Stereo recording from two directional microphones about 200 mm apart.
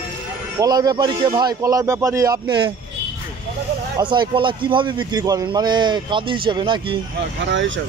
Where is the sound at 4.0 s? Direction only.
20° right (ahead or behind).